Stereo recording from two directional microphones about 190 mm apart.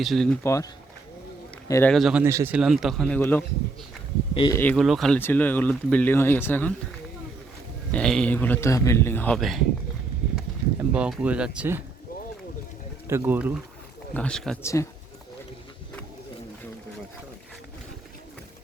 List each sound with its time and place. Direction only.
0.0 s speech: centre (ahead or behind)
0.4 s speech: 15° left (ahead or behind)
1.9 s speech: centre (ahead or behind)
2.2 s speech: 15° right (ahead or behind); by 3.4 s 10° left (ahead or behind)
4.4 s speech: 20° left (ahead or behind)
4.6 s speech: 5° left (ahead or behind)
7.9 s speech: 5° left (ahead or behind)
10.8 s speech: 5° right (ahead or behind)
13.1 s speech: 10° right (ahead or behind)
14.1 s speech: 5° left (ahead or behind)
14.6 s speech: 15° left (ahead or behind)